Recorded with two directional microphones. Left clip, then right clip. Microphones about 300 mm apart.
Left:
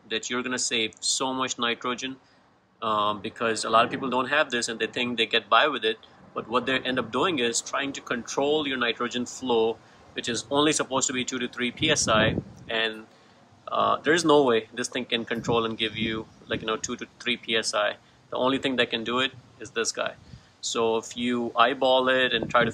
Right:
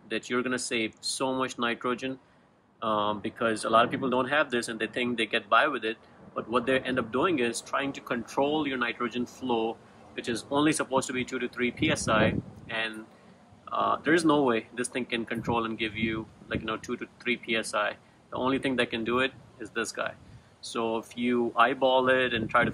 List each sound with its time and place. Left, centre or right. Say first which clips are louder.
0.1 s speech: left 1 dB; centre